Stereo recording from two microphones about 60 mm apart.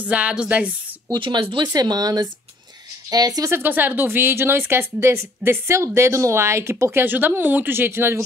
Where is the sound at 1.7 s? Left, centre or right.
Right.